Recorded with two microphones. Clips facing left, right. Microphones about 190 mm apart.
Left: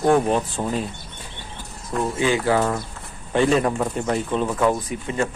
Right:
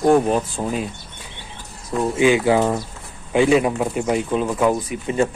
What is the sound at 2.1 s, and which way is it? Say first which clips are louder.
Speech: right 5 dB; 15° right (ahead or behind).